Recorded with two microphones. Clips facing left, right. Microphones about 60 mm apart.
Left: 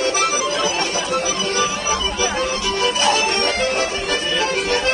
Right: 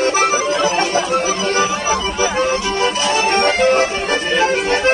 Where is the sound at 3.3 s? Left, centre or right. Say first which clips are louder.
Right 6 dB; right.